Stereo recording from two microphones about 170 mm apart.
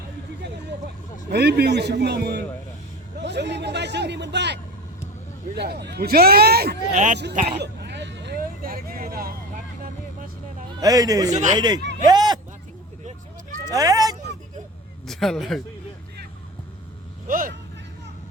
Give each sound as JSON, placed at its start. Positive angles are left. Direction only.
{"t": 1.3, "sound": "a man's voice", "side_deg": -80}
{"t": 3.2, "sound": "a man's voice", "side_deg": -90}
{"t": 5.5, "sound": "speech", "side_deg": -75}
{"t": 6.9, "sound": "speech", "side_deg": -45}
{"t": 7.6, "sound": "hubbub", "side_deg": -80}
{"t": 10.8, "sound": "a man's voice", "side_deg": -20}
{"t": 11.3, "sound": "speech", "side_deg": -45}
{"t": 11.5, "sound": "a man's voice", "side_deg": -25}
{"t": 12.0, "sound": "a sound", "side_deg": -25}
{"t": 13.7, "sound": "speech", "side_deg": -20}
{"t": 15.0, "sound": "a man's voice", "side_deg": 0}
{"t": 17.2, "sound": "speech", "side_deg": -55}